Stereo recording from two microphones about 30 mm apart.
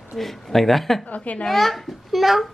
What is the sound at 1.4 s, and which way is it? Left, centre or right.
A child's voice, centre.